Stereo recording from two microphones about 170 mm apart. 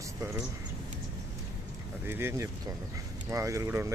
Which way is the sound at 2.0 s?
15° right (ahead or behind).